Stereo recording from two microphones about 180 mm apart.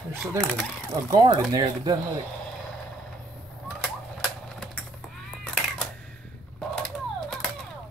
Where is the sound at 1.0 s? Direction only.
20° right (ahead or behind).